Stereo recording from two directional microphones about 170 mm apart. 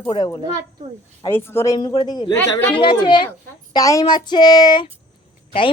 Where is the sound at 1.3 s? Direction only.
15° left (ahead or behind).